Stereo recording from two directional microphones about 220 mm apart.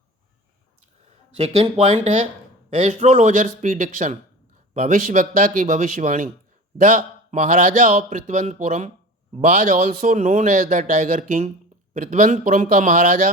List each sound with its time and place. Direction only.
1.4 s a man's voice: 30° right (ahead or behind)